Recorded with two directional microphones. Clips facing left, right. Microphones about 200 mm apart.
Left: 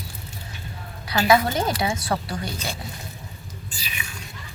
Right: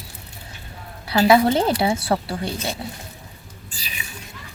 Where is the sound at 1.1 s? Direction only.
30° right (ahead or behind).